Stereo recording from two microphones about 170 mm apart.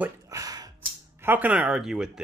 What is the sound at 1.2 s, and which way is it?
Speech, 10° right (ahead or behind).